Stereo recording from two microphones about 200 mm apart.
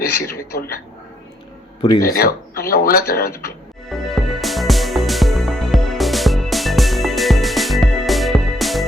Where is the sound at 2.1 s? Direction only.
50° left (ahead or behind).